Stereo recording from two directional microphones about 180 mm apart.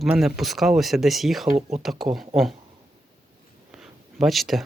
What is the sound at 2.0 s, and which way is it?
Speech, 25° right (ahead or behind).